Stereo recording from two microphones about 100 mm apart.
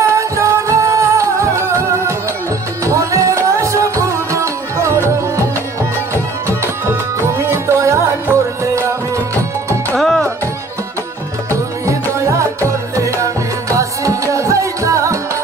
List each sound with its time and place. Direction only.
0.0 s music: 30° right (ahead or behind)
6.4 s music: 25° right (ahead or behind)
9.9 s music: centre (ahead or behind)
11.8 s music: 30° right (ahead or behind)